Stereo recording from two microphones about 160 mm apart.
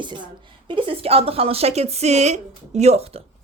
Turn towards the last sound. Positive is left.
turn(degrees=-40)  # may be behind; listen again after turning